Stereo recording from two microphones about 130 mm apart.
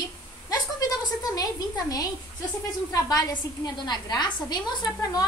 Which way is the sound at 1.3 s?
30° left (ahead or behind).